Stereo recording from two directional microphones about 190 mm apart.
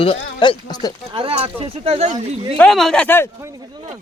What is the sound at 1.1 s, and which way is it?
Speech, 30° right (ahead or behind).